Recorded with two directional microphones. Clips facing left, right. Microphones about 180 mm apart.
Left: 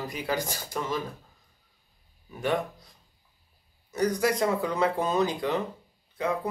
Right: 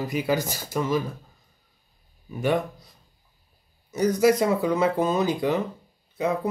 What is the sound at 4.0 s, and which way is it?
Speech, 5° right (ahead or behind).